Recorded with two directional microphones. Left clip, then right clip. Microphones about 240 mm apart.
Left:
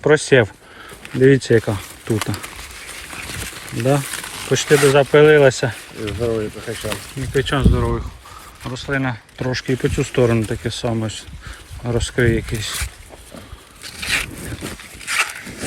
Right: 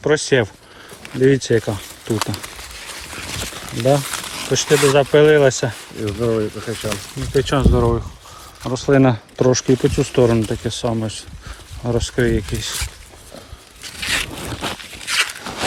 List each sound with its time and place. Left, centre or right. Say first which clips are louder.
0.0 s speech: left 3 dB; centre
4.4 s speech: left 1 dB; centre
6.1 s speech: right 2 dB; right
6.9 s speech: right 1 dB; centre
13.9 s a sound: even; centre